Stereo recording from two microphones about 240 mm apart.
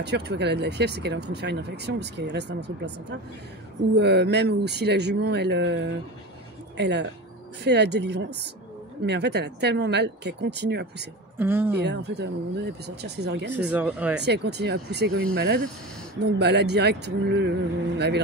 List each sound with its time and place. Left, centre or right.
0.0 s speech: right
11.3 s speech: centre
11.8 s speech: right
13.7 s speech: centre
14.2 s speech: right